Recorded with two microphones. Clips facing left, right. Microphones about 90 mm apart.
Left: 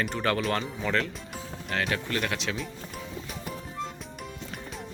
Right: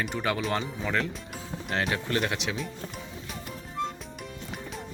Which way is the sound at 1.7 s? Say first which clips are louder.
Right 1 dB; 30° right (ahead or behind).